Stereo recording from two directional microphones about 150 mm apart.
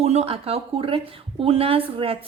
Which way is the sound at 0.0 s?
45° right (ahead or behind).